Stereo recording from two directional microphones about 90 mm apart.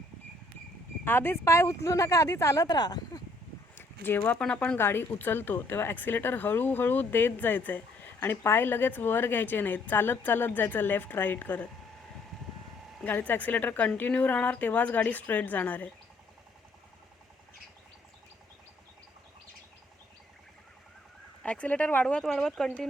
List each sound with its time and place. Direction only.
1.0 s speech: 25° left (ahead or behind)
2.6 s speech: 50° left (ahead or behind)
3.8 s a sound: 25° left (ahead or behind)
4.2 s speech: 10° left (ahead or behind)
4.8 s speech: 25° left (ahead or behind)
13.1 s speech: 20° left (ahead or behind)
21.4 s speech: 15° left (ahead or behind)